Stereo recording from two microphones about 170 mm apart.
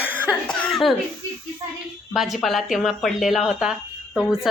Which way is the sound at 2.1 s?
Centre (ahead or behind).